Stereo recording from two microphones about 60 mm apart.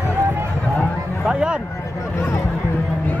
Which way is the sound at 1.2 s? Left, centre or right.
Centre.